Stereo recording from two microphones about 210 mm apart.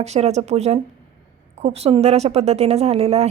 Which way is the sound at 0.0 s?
30° right (ahead or behind).